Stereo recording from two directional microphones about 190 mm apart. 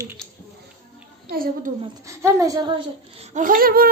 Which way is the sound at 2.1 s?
15° right (ahead or behind).